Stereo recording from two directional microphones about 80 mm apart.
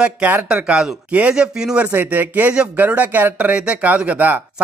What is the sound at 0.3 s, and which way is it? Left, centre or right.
Speech, right.